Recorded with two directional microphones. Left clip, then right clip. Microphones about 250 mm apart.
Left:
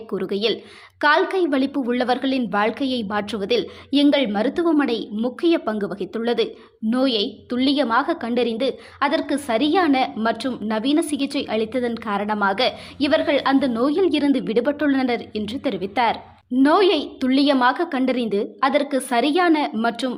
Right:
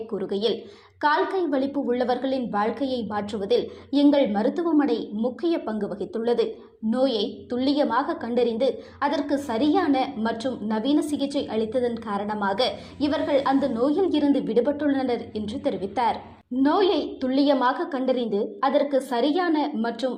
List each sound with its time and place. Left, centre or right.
0.1 s a woman's voice: left